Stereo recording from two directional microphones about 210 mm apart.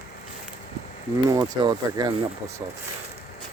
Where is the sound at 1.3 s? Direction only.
20° right (ahead or behind).